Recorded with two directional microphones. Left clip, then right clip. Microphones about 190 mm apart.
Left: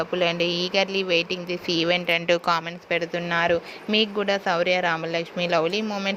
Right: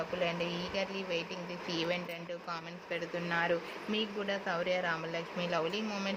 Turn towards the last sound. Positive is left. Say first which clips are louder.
# left 11 dB
turn(degrees=30)  # may be behind; listen again after turning